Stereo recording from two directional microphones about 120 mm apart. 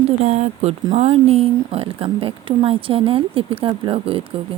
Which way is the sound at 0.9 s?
65° right (ahead or behind).